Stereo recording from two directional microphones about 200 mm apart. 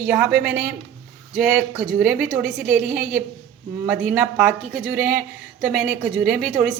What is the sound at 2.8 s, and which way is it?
Speech, 45° right (ahead or behind).